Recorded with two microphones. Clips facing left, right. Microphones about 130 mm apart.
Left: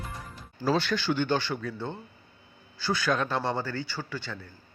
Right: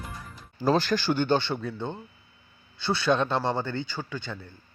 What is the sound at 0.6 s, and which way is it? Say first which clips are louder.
Speech: right 3 dB; 40° right (ahead or behind).